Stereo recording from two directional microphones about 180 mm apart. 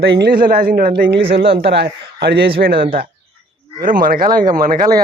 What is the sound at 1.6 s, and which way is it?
Speech, 70° right (ahead or behind).